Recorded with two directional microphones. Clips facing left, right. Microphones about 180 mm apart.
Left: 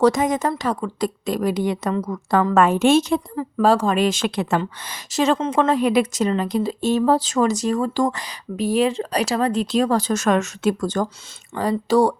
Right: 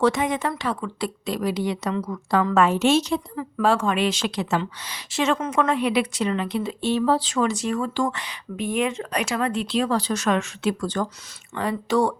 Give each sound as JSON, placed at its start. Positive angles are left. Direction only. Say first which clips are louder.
{"t": 0.0, "sound": "a woman's voice", "louder": "left 4 dB", "side_deg": 40}
{"t": 3.3, "sound": "speech", "louder": "left 4 dB", "side_deg": 35}